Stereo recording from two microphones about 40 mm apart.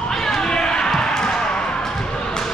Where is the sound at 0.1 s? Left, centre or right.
Centre.